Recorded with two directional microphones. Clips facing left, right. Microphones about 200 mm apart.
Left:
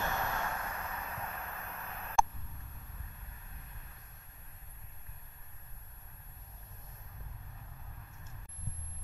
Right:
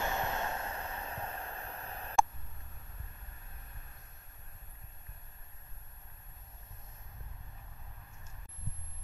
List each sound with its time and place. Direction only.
0.0 s vehicle: 20° right (ahead or behind)